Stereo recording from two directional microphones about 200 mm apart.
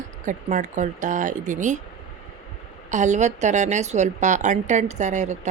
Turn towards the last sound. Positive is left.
turn(degrees=-35)  # may be behind; listen again after turning